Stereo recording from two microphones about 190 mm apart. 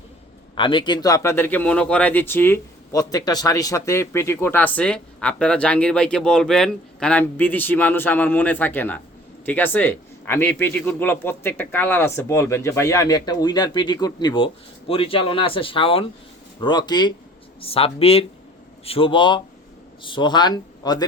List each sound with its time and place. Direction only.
0.5 s speech: 25° left (ahead or behind)